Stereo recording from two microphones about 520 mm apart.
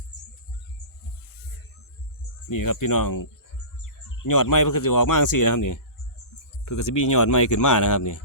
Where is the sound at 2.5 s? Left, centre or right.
Left.